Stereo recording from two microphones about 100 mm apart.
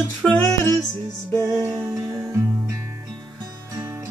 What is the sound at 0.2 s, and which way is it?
Music, 10° left (ahead or behind).